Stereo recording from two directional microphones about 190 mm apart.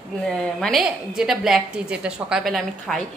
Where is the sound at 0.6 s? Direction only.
Centre (ahead or behind).